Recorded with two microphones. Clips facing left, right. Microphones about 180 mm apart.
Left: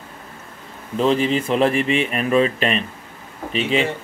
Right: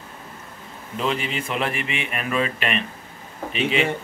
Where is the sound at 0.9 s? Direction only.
35° left (ahead or behind).